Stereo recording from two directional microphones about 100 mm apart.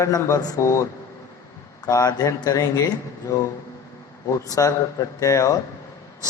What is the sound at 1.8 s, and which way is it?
A man's voice, 35° left (ahead or behind).